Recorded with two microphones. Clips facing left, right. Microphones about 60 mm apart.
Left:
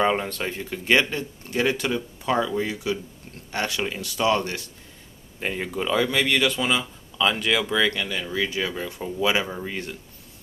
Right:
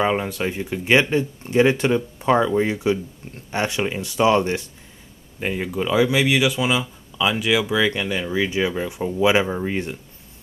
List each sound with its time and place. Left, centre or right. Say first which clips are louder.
0.0 s speech: right 2 dB; centre; by 4.6 s right
5.4 s a man's voice: right 3 dB; centre
7.9 s speech: right 4 dB; centre